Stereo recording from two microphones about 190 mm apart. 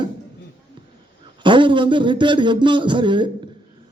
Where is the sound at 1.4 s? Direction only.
25° right (ahead or behind).